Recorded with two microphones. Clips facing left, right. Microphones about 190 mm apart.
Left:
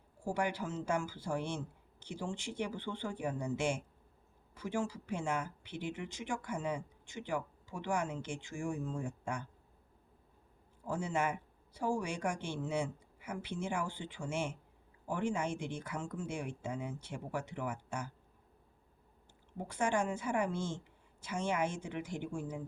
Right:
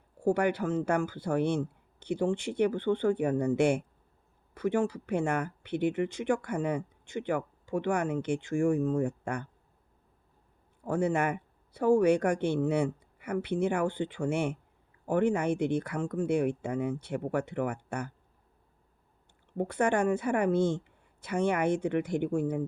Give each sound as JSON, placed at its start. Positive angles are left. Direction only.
{"t": 0.3, "sound": "speech", "side_deg": -60}
{"t": 10.8, "sound": "speech", "side_deg": -60}
{"t": 19.5, "sound": "speech", "side_deg": -60}